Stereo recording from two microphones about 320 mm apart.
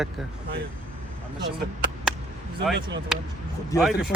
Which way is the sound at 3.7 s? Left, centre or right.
Centre.